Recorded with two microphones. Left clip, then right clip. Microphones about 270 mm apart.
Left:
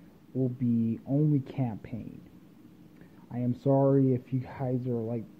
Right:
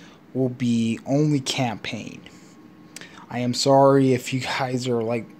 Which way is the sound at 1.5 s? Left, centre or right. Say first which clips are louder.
Right 12 dB; centre.